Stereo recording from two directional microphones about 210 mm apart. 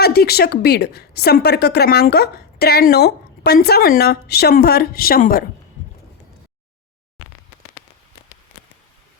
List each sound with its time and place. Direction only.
0.0 s a woman's voice: 50° left (ahead or behind)